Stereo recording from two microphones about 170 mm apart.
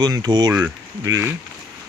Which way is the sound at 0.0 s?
25° right (ahead or behind).